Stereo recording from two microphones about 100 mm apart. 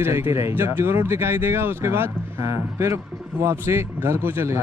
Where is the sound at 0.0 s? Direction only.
25° right (ahead or behind).